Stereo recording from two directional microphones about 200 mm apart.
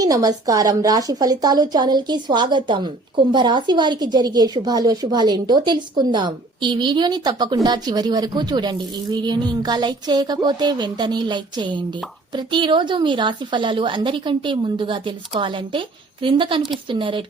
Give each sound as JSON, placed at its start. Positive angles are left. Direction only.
{"t": 0.0, "sound": "a woman's voice", "side_deg": -20}